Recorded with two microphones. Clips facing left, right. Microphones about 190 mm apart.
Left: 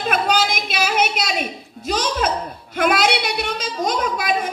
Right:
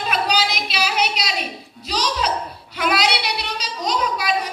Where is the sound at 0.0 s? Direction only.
50° left (ahead or behind).